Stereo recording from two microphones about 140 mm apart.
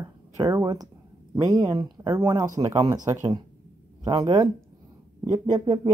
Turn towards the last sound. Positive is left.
turn(degrees=-25)  # may be behind; listen again after turning